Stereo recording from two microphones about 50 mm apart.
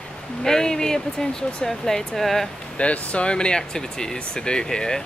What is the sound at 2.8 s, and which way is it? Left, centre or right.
Speech, left.